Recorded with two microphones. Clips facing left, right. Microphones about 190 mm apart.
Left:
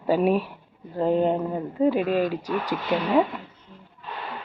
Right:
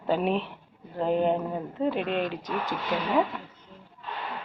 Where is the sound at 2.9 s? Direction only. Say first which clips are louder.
Left 5 dB; 20° left (ahead or behind).